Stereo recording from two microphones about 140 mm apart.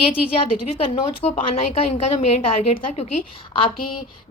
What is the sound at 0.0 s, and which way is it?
A woman's voice, 45° left (ahead or behind).